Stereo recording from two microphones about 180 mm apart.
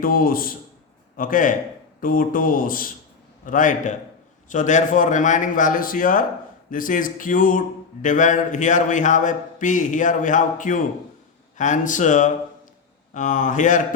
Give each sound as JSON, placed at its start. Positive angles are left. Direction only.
{"t": 0.0, "sound": "a man's voice", "side_deg": 50}